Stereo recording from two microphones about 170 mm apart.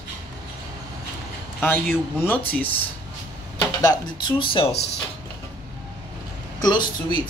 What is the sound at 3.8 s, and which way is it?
Speech, 25° left (ahead or behind).